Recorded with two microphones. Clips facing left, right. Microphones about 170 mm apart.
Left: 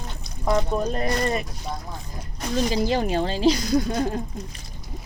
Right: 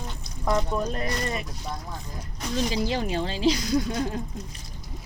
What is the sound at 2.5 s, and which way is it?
Speech, 50° left (ahead or behind).